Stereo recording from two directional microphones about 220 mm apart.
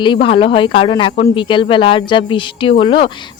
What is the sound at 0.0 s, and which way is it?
Speech, 20° left (ahead or behind).